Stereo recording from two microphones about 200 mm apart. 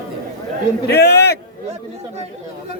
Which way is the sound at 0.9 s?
55° left (ahead or behind).